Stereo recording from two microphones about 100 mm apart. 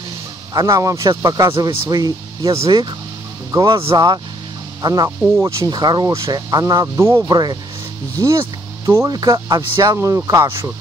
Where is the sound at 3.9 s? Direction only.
40° right (ahead or behind).